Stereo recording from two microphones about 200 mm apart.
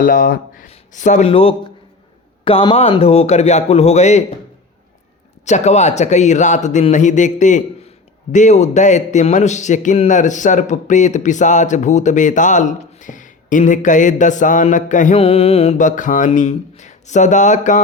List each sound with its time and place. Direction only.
0.0 s speech: 40° left (ahead or behind)
5.5 s speech: 35° left (ahead or behind)